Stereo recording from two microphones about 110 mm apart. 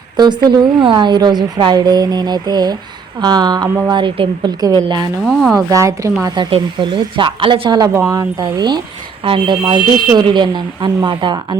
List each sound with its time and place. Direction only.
0.2 s a woman's voice: 40° right (ahead or behind)
5.2 s speech: 5° left (ahead or behind)
5.5 s a woman's voice: 30° right (ahead or behind)
6.2 s a woman's voice: 45° right (ahead or behind)
9.2 s speech: 50° right (ahead or behind)